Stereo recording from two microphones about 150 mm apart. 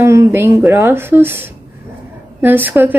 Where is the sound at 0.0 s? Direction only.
20° right (ahead or behind).